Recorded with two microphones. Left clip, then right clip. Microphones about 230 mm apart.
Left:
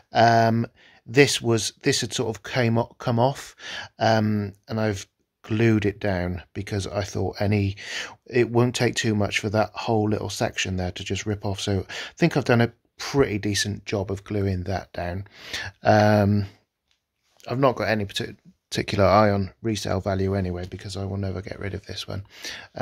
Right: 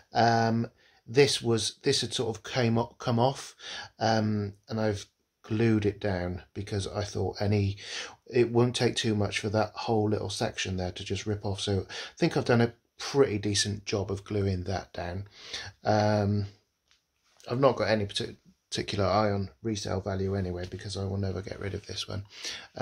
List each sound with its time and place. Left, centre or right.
0.1 s speech: left